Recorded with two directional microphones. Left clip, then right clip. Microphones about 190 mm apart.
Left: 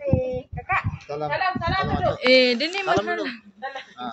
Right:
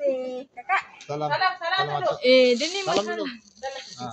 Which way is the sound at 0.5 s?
15° left (ahead or behind).